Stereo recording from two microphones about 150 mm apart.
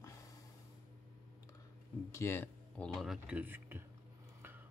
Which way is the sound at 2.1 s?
15° left (ahead or behind).